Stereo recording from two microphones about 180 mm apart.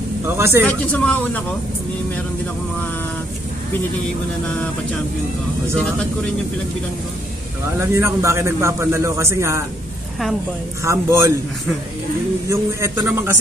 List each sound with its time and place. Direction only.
0.4 s a man's voice: 15° right (ahead or behind)
0.9 s speech: 10° left (ahead or behind)
7.9 s a man's voice: 15° right (ahead or behind)
10.8 s a man's voice: 15° right (ahead or behind)
12.4 s a man's voice: 15° right (ahead or behind)